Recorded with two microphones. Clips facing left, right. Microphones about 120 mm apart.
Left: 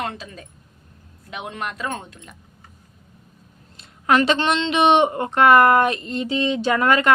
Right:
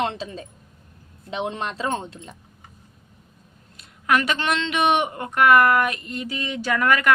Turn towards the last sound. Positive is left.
turn(degrees=25)  # may be behind; listen again after turning